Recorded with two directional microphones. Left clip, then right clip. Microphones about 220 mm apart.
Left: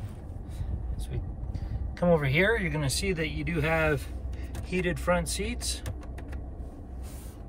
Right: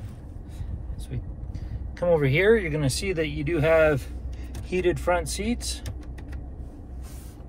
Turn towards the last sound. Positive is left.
turn(degrees=-5)  # may be behind; listen again after turning